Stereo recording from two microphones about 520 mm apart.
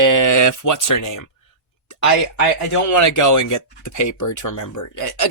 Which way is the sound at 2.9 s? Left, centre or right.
Left.